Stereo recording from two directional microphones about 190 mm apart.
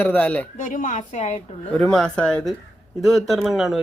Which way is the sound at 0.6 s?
40° left (ahead or behind).